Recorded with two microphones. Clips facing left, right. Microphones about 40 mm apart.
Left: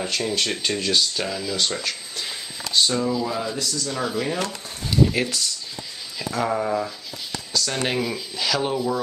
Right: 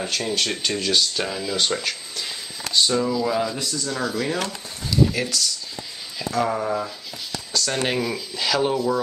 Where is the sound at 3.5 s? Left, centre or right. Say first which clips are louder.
Even; right.